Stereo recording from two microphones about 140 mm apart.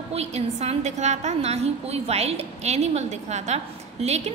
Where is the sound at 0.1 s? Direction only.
50° right (ahead or behind).